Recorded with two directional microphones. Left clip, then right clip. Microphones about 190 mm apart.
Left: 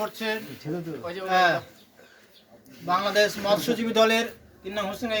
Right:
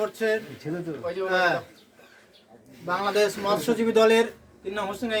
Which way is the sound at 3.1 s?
10° right (ahead or behind).